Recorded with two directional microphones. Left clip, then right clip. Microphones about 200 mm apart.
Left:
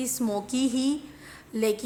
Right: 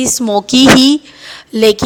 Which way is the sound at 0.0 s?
40° right (ahead or behind).